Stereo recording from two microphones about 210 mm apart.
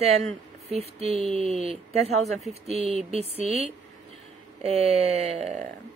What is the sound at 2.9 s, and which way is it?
Speech, 30° right (ahead or behind).